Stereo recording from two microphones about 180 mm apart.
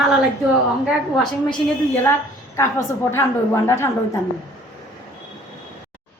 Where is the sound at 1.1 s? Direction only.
Centre (ahead or behind).